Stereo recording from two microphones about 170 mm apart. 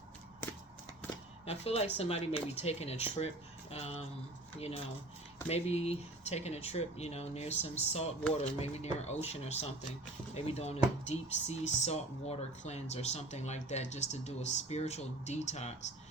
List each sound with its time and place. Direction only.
1.5 s speech: 35° left (ahead or behind)
5.5 s speech: 40° left (ahead or behind)